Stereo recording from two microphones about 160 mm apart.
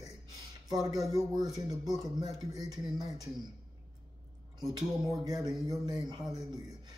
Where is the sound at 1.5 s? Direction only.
20° right (ahead or behind).